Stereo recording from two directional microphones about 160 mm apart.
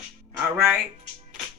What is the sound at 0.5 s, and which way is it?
Speech, 10° right (ahead or behind).